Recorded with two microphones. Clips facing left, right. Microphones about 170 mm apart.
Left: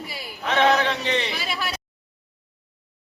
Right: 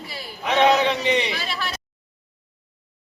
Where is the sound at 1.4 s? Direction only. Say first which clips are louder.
Even; 5° left (ahead or behind).